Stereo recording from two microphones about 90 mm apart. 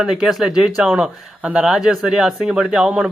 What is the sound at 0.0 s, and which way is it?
Speech, 5° right (ahead or behind).